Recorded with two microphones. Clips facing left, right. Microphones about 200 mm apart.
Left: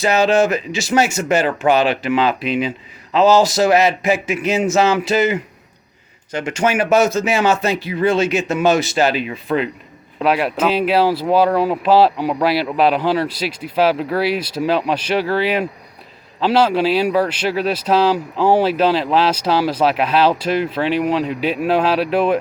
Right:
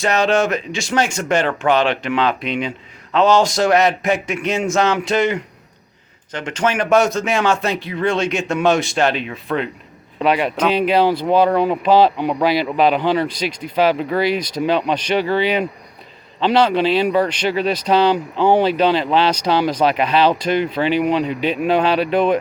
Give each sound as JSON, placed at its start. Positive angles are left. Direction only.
{"t": 0.0, "sound": "speech", "side_deg": 5}